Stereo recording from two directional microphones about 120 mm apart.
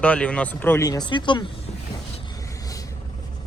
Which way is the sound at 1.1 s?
40° left (ahead or behind).